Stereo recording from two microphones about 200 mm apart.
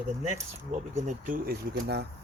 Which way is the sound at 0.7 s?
35° right (ahead or behind).